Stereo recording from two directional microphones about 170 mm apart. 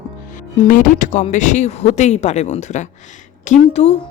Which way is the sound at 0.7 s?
50° left (ahead or behind).